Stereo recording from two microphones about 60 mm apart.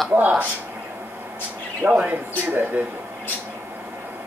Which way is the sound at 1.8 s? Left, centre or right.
Right.